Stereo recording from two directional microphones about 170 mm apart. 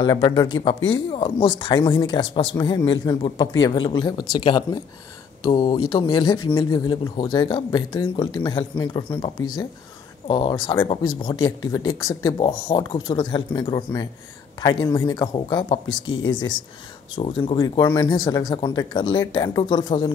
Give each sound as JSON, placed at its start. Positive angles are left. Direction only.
{"t": 0.0, "sound": "speech", "side_deg": 25}
{"t": 17.1, "sound": "speech", "side_deg": 30}